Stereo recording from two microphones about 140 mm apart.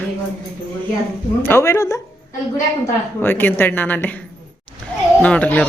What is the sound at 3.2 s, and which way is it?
Speech, 15° left (ahead or behind).